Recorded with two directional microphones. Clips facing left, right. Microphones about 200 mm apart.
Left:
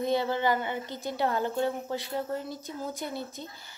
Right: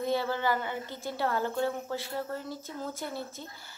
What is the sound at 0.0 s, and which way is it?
A woman's voice, 20° left (ahead or behind).